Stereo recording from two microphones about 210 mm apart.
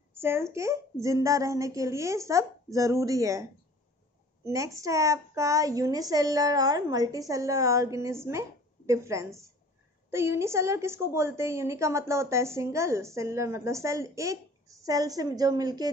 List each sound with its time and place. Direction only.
0.1 s a woman's voice: 10° right (ahead or behind)
4.5 s a woman's voice: 15° right (ahead or behind)